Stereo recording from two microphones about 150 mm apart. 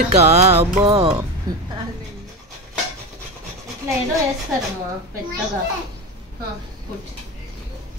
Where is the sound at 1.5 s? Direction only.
25° right (ahead or behind).